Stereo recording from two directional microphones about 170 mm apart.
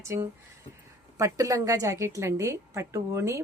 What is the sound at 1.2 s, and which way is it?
A woman's voice, 20° right (ahead or behind).